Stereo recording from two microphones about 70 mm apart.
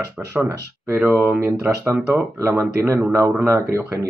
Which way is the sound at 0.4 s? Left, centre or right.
Right.